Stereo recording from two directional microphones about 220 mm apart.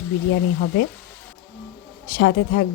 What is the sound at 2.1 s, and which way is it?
Speech, 50° left (ahead or behind).